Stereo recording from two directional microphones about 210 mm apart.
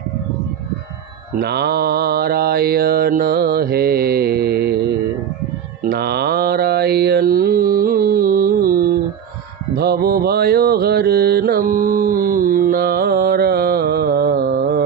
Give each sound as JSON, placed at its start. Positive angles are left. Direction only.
{"t": 1.3, "sound": "mantra", "side_deg": -50}
{"t": 5.9, "sound": "mantra", "side_deg": -50}